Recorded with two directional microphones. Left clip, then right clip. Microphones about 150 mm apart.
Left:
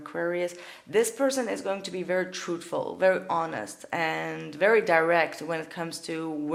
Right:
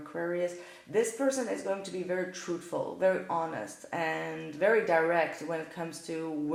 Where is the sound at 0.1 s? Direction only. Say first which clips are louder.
Left 3 dB; 40° left (ahead or behind).